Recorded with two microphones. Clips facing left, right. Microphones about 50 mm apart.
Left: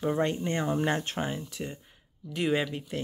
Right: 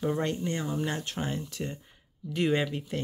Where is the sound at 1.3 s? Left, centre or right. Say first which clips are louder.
Right 1 dB; centre.